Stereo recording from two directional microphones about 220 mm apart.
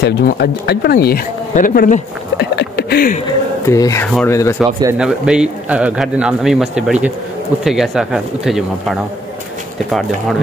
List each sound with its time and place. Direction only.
0.0 s speech: 50° left (ahead or behind)
3.3 s speech: 15° left (ahead or behind)
4.9 s speech: 5° right (ahead or behind)